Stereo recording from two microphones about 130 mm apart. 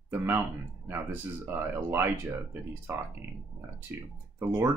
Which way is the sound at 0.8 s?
15° right (ahead or behind).